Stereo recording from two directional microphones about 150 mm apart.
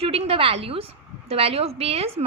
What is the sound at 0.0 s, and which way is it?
A woman's voice, 40° right (ahead or behind).